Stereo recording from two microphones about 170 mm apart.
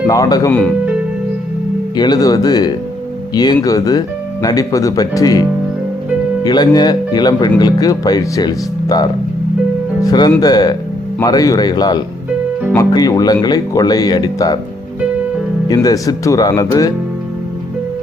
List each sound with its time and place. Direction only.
0.1 s speech: 20° left (ahead or behind)
2.0 s speech: 25° left (ahead or behind)
15.7 s speech: 20° left (ahead or behind)